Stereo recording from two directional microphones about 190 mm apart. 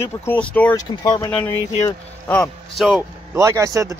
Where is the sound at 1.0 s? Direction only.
20° left (ahead or behind).